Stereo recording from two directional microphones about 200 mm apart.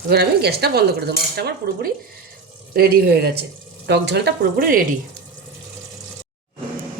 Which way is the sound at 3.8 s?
60° right (ahead or behind).